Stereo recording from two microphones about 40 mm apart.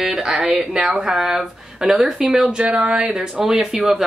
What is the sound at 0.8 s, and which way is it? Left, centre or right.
Speech, centre.